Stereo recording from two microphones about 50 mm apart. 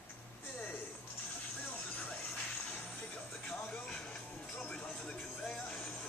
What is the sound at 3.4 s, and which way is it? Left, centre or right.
Music, centre.